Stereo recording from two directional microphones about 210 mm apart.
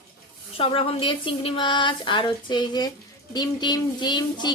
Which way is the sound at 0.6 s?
25° left (ahead or behind).